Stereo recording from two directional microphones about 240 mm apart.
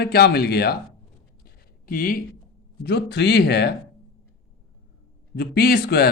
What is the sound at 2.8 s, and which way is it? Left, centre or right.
Speech, left.